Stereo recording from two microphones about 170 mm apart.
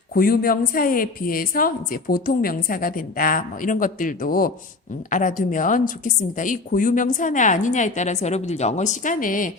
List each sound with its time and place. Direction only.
0.1 s a woman's voice: 60° left (ahead or behind)